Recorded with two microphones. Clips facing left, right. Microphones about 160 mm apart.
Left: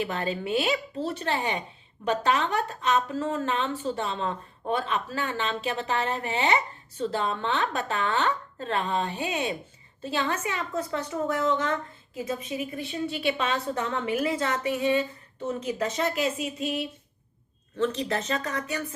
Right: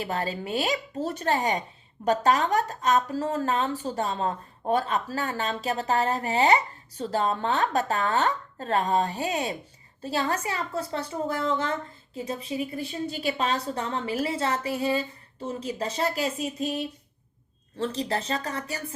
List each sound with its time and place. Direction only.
0.0 s a woman's voice: 40° right (ahead or behind)